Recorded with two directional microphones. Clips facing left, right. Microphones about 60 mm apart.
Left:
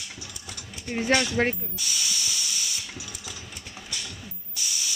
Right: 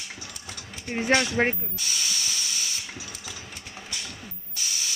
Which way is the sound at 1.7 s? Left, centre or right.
Right.